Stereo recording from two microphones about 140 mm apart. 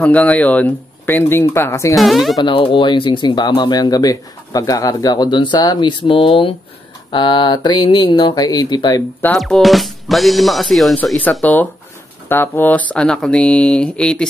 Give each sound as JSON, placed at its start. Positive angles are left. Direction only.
{"t": 0.0, "sound": "speech", "side_deg": 10}
{"t": 2.0, "sound": "speech", "side_deg": 0}
{"t": 2.3, "sound": "speech", "side_deg": 35}
{"t": 9.3, "sound": "speech", "side_deg": 0}